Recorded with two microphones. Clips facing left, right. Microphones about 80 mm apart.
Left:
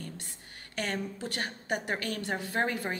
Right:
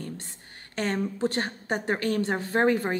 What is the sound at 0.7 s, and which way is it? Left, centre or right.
A woman's voice, right.